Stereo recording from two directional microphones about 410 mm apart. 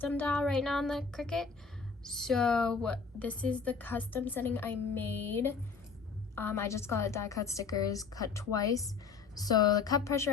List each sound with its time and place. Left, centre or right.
0.0 s a woman's voice: centre